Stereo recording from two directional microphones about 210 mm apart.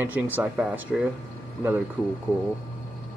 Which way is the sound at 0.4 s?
5° right (ahead or behind).